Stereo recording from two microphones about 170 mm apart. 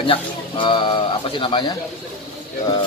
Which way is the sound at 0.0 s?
30° left (ahead or behind).